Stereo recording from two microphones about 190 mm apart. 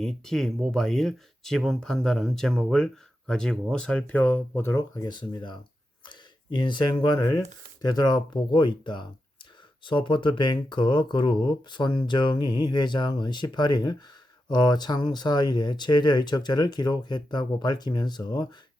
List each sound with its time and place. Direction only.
0.0 s speech: centre (ahead or behind); by 18.4 s 20° left (ahead or behind)